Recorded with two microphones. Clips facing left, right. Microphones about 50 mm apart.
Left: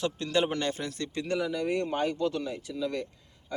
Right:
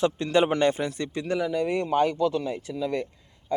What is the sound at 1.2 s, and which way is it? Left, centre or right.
Speech, centre.